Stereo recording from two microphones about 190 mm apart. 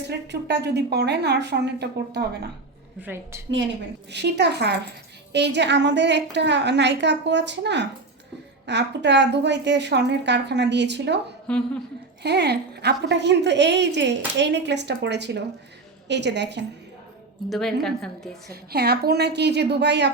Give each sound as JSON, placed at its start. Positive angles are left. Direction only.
{"t": 0.1, "sound": "a woman's voice", "side_deg": -60}
{"t": 3.0, "sound": "a woman's voice", "side_deg": -10}
{"t": 4.1, "sound": "a woman's voice", "side_deg": -65}
{"t": 11.4, "sound": "a woman's voice", "side_deg": 5}
{"t": 12.2, "sound": "a woman's voice", "side_deg": -60}
{"t": 17.5, "sound": "a woman's voice", "side_deg": 0}
{"t": 18.7, "sound": "a woman's voice", "side_deg": -55}